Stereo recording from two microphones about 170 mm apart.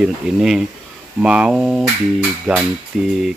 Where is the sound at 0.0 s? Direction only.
5° right (ahead or behind).